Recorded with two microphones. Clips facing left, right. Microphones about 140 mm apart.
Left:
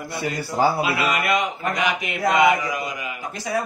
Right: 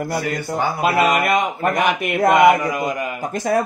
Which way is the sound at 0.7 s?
45° right (ahead or behind).